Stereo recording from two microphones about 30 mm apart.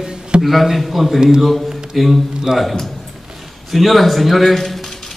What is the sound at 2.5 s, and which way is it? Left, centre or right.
Speech, right.